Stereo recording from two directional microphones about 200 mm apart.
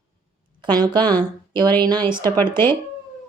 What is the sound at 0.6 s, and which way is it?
A woman's voice, 20° right (ahead or behind).